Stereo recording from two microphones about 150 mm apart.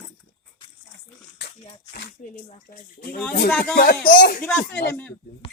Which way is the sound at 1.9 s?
80° left.